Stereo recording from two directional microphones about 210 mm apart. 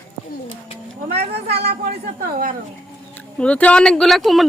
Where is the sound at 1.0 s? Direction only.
30° right (ahead or behind).